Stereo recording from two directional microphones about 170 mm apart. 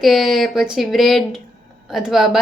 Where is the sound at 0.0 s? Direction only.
Centre (ahead or behind).